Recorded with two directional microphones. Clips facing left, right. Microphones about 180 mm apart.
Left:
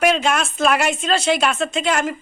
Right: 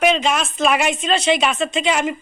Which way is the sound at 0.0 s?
5° left (ahead or behind).